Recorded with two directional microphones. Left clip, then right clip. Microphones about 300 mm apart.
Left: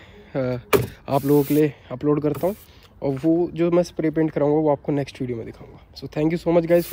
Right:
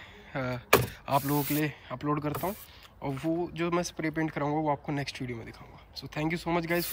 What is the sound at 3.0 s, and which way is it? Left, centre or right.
Speech, left.